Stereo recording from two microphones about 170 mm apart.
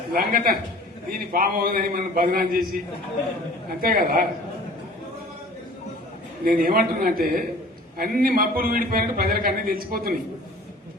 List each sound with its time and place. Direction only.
0.1 s a man's voice: 60° right (ahead or behind)
3.8 s a man's voice: 60° right (ahead or behind)
6.4 s a man's voice: 60° right (ahead or behind)